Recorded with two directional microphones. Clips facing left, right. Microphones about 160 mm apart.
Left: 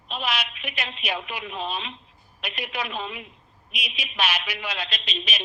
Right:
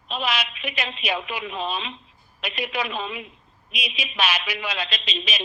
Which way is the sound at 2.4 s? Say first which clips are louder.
Right 4 dB; 90° right.